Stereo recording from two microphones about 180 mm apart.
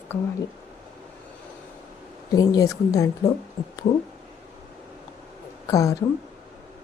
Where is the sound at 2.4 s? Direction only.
20° left (ahead or behind).